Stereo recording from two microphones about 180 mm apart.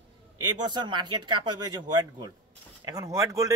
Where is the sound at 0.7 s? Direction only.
25° right (ahead or behind).